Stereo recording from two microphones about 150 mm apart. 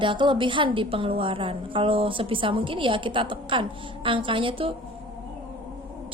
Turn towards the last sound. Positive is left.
turn(degrees=-35)  # may be behind; listen again after turning